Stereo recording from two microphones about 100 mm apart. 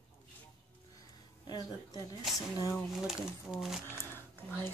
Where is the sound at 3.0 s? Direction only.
5° right (ahead or behind).